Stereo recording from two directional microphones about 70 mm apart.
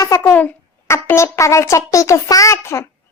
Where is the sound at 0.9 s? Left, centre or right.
Left.